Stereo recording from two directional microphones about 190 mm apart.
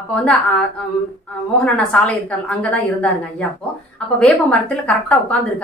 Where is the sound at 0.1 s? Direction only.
5° left (ahead or behind).